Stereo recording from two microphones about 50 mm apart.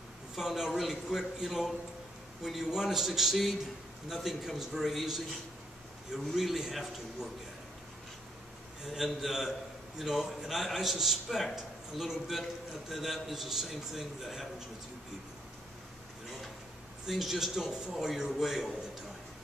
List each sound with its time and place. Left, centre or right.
0.4 s a man's voice: centre
6.3 s a man's voice: centre
8.8 s a man's voice: centre
17.0 s a man's voice: centre